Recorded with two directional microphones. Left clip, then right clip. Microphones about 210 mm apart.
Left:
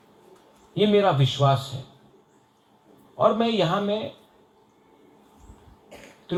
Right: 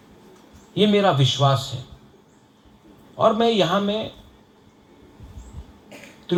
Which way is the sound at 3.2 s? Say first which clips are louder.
Right 3 dB; 50° right (ahead or behind).